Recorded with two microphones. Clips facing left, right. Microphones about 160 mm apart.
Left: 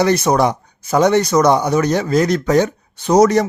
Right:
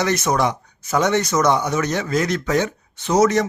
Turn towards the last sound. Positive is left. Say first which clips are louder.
# left 5 dB
turn(degrees=35)  # may be behind; listen again after turning